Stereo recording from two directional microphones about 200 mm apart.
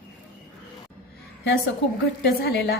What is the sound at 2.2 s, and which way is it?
Speech, 55° left (ahead or behind).